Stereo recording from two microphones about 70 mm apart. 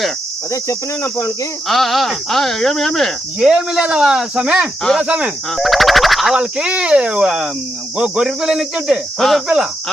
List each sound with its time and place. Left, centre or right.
1.6 s speech: centre
3.4 s speech: centre
5.5 s speech: centre
6.3 s speech: centre
7.3 s speech: centre
9.1 s speech: centre